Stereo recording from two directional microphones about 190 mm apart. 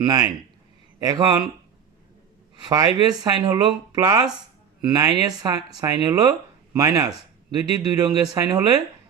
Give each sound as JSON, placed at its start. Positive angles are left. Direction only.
{"t": 0.0, "sound": "speech", "side_deg": -20}
{"t": 2.6, "sound": "speech", "side_deg": -20}